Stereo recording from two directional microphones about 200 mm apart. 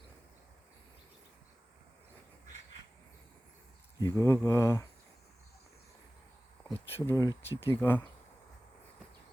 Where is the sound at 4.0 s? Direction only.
15° left (ahead or behind).